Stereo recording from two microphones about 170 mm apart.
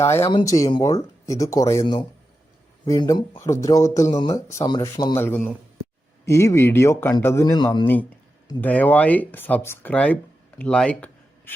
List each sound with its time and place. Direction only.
0.0 s a man's voice: 15° left (ahead or behind)
8.6 s a man's voice: 10° left (ahead or behind)
10.6 s a sound: 5° left (ahead or behind)